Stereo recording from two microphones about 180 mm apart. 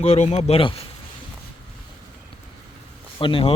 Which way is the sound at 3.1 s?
30° left (ahead or behind).